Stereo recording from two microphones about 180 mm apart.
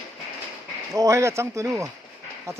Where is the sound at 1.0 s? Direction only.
15° right (ahead or behind).